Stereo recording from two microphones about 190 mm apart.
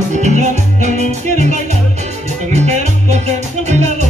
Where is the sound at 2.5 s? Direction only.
35° right (ahead or behind).